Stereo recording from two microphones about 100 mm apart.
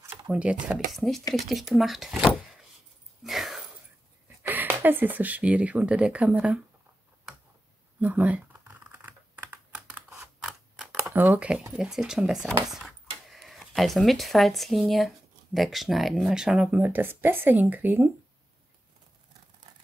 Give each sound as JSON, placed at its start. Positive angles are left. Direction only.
{"t": 0.3, "sound": "speech", "side_deg": -10}
{"t": 0.7, "sound": "speech", "side_deg": 0}
{"t": 3.3, "sound": "a sound", "side_deg": -5}
{"t": 4.4, "sound": "speech", "side_deg": -20}
{"t": 8.0, "sound": "computer keyboard", "side_deg": -15}
{"t": 10.0, "sound": "scissors", "side_deg": -5}
{"t": 11.1, "sound": "speech", "side_deg": -15}
{"t": 16.8, "sound": "speech", "side_deg": -20}